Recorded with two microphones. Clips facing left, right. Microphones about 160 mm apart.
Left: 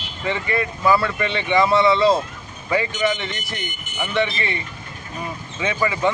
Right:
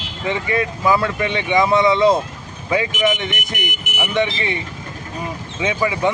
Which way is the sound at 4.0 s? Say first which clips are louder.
Right 2 dB; 15° right (ahead or behind).